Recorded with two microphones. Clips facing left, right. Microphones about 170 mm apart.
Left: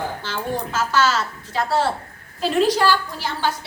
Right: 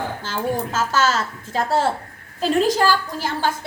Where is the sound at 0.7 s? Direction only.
45° right (ahead or behind).